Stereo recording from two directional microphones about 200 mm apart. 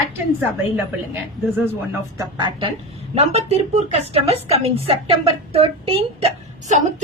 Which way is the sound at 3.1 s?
30° right (ahead or behind).